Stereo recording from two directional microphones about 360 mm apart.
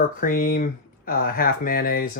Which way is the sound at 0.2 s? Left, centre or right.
Left.